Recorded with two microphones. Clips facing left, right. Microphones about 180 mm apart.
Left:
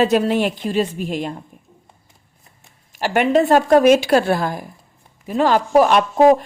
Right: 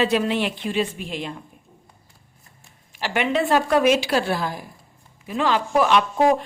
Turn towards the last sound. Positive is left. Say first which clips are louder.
# left 5 dB
turn(degrees=45)  # may be behind; listen again after turning